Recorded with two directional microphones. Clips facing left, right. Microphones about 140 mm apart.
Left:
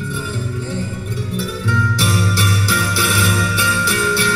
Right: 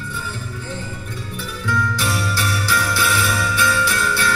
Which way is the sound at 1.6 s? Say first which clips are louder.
Even; 20° left (ahead or behind).